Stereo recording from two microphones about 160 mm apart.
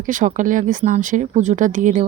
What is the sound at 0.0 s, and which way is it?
Speech, 55° right (ahead or behind).